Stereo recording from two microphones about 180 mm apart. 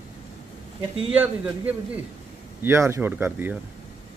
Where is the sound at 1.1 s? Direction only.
10° right (ahead or behind).